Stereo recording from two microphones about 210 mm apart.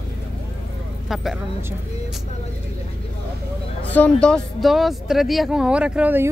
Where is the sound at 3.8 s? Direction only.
5° left (ahead or behind); by 6.3 s 10° right (ahead or behind).